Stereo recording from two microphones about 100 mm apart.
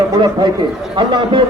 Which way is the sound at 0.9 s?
55° right (ahead or behind).